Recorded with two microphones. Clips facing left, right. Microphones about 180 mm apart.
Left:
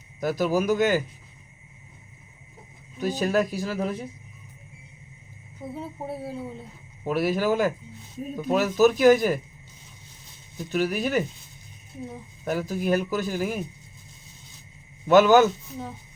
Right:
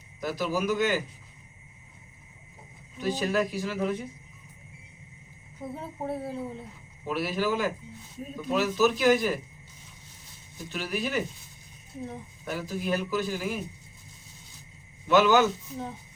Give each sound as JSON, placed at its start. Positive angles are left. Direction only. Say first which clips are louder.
{"t": 0.2, "sound": "speech", "louder": "left 5 dB", "side_deg": 45}
{"t": 3.0, "sound": "speech", "louder": "left 3 dB", "side_deg": 40}
{"t": 5.7, "sound": "speech", "louder": "even", "side_deg": 5}
{"t": 7.0, "sound": "speech", "louder": "left 5 dB", "side_deg": 45}
{"t": 10.7, "sound": "speech", "louder": "left 6 dB", "side_deg": 45}
{"t": 12.5, "sound": "speech", "louder": "left 5 dB", "side_deg": 45}
{"t": 15.0, "sound": "speech", "louder": "left 5 dB", "side_deg": 45}